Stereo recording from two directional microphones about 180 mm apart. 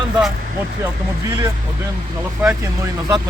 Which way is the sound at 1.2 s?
15° right (ahead or behind).